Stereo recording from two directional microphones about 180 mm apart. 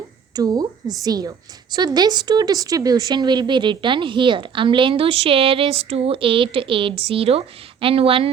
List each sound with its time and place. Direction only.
0.3 s a woman's voice: 20° right (ahead or behind)